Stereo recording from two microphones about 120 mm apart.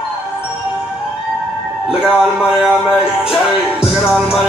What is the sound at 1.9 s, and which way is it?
Music, 5° right (ahead or behind).